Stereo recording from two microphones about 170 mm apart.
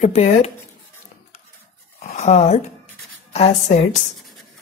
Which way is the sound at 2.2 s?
40° left (ahead or behind).